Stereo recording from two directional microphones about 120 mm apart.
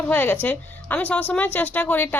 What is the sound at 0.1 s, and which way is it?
A woman's voice, 15° left (ahead or behind).